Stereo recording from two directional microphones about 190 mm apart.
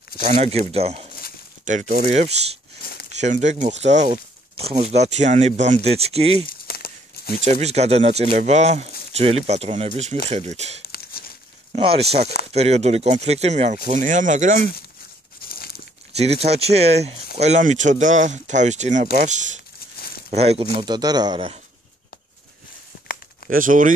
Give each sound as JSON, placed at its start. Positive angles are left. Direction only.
{"t": 0.2, "sound": "speech", "side_deg": -35}
{"t": 6.4, "sound": "crumpling", "side_deg": 55}
{"t": 7.4, "sound": "speech", "side_deg": -35}
{"t": 10.9, "sound": "crumpling", "side_deg": 50}
{"t": 11.7, "sound": "speech", "side_deg": -30}
{"t": 15.4, "sound": "crumpling", "side_deg": 50}
{"t": 16.2, "sound": "speech", "side_deg": -35}
{"t": 20.8, "sound": "speech", "side_deg": -20}
{"t": 23.4, "sound": "speech", "side_deg": -45}